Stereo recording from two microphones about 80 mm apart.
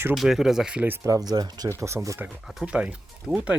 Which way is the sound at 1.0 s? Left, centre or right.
Right.